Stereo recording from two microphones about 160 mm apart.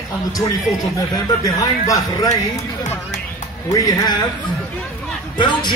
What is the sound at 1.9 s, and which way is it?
Speech, 20° left (ahead or behind).